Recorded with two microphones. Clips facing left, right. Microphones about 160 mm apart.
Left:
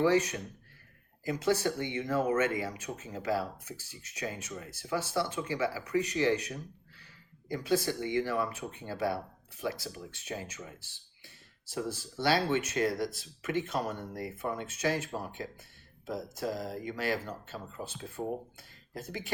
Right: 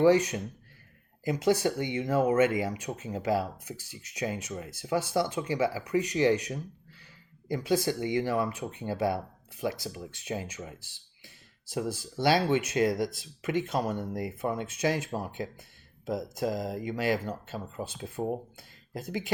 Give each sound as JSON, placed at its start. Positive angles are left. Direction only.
{"t": 0.0, "sound": "speech", "side_deg": -15}
{"t": 12.2, "sound": "speech", "side_deg": -15}